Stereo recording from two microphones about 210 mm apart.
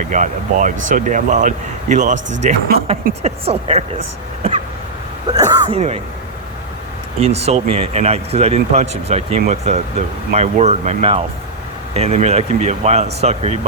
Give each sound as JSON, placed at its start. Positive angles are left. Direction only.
{"t": 0.1, "sound": "speech", "side_deg": -35}
{"t": 5.3, "sound": "speech", "side_deg": -20}
{"t": 5.7, "sound": "speech", "side_deg": -30}
{"t": 7.2, "sound": "speech", "side_deg": -30}